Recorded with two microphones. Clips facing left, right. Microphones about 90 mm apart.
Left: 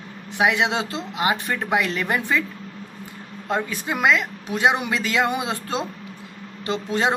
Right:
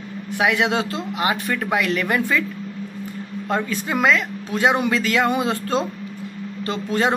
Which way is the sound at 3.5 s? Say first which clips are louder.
Right 1 dB; 15° left (ahead or behind).